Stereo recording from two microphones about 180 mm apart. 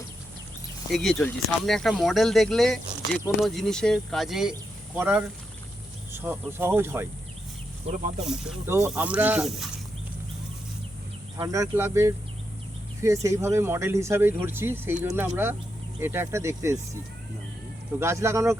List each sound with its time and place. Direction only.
0.9 s speech: centre (ahead or behind)
7.9 s speech: 35° right (ahead or behind)
8.6 s speech: 10° right (ahead or behind)
11.3 s speech: 20° right (ahead or behind)
18.0 s speech: 15° right (ahead or behind)